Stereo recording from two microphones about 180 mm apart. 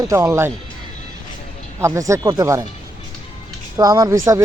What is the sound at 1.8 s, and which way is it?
Speech, 15° right (ahead or behind).